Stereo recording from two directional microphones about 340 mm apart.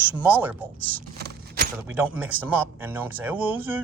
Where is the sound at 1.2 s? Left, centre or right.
Right.